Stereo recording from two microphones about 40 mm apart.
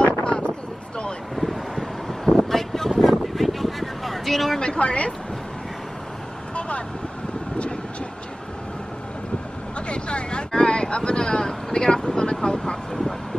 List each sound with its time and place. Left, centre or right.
0.0 s a sound: left
1.3 s vehicle: centre
2.2 s vehicle: centre
3.0 s a sound: centre
4.6 s a woman's voice: left
9.8 s vehicle: left